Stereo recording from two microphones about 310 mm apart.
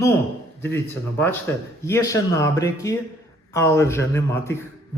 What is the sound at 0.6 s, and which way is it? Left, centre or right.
Speech, centre.